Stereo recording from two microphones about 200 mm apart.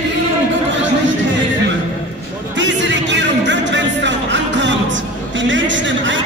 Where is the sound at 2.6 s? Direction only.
65° right (ahead or behind).